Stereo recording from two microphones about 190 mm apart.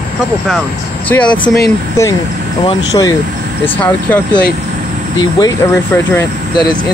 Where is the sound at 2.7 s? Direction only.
20° left (ahead or behind).